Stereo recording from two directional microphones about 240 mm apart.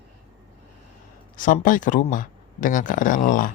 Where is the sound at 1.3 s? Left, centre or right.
Left.